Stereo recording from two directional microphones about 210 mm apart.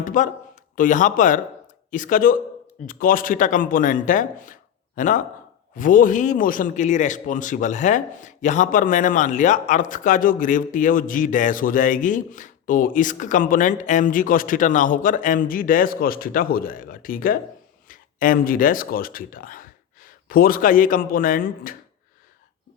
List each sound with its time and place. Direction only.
0.0 s a man's voice: 40° left (ahead or behind)